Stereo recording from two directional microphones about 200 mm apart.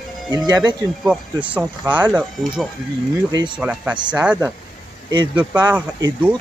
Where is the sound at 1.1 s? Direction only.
5° right (ahead or behind).